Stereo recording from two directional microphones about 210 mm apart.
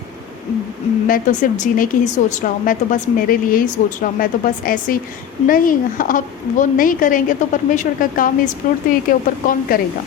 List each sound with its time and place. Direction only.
1.0 s speech: 40° left (ahead or behind)